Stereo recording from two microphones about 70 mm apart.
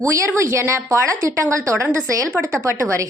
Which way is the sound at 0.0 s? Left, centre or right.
Right.